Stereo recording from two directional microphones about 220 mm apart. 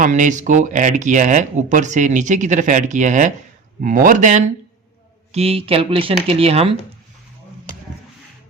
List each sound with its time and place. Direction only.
0.0 s speech: 35° right (ahead or behind)